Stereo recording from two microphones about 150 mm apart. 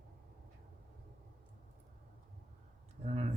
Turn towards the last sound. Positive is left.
turn(degrees=-45)  # may be behind; listen again after turning